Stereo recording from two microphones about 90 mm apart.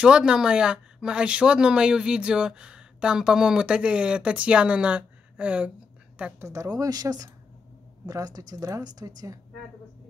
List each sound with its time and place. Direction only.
0.0 s speech: 10° right (ahead or behind)
6.4 s speech: 35° right (ahead or behind)